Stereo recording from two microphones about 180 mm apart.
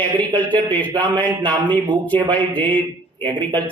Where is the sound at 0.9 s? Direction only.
25° right (ahead or behind).